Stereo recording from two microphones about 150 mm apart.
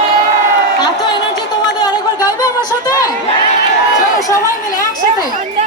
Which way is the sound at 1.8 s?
25° left (ahead or behind).